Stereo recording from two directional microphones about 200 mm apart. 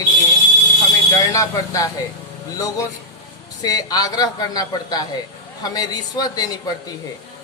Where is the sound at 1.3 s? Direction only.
15° left (ahead or behind).